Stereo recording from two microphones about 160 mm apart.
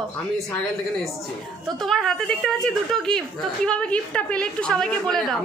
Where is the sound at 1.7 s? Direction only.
Centre (ahead or behind).